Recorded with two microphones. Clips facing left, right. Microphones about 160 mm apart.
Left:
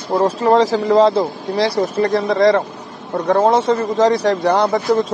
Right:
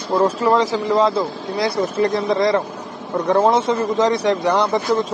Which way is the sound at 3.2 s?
45° left (ahead or behind).